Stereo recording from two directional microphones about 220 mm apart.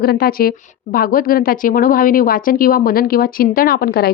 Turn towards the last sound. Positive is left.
turn(degrees=45)  # may be behind; listen again after turning